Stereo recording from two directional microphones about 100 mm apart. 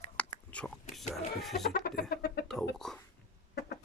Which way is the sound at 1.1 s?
Centre (ahead or behind).